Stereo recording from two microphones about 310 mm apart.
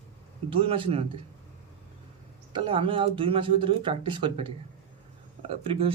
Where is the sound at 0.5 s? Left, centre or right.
Centre.